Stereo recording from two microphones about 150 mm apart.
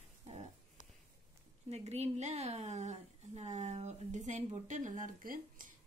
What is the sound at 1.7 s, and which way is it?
A woman's voice, 45° right (ahead or behind).